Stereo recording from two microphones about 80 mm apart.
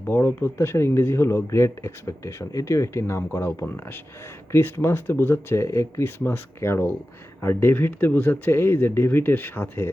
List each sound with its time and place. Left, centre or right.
0.0 s speech: left